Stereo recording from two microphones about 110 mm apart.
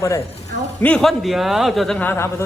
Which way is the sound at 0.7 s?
15° left (ahead or behind).